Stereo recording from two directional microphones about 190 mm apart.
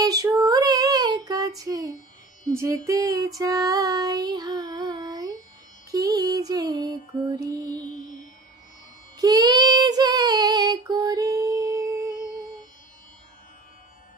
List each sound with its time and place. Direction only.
0.0 s female singing: 20° right (ahead or behind)
1.6 s speech: 20° right (ahead or behind)
2.5 s music: 15° right (ahead or behind)
3.3 s child singing: 20° right (ahead or behind)
6.0 s music: 20° right (ahead or behind)
9.2 s child singing: 20° right (ahead or behind)